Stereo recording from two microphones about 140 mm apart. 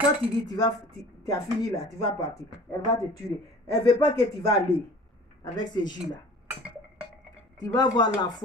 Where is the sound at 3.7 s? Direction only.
25° left (ahead or behind).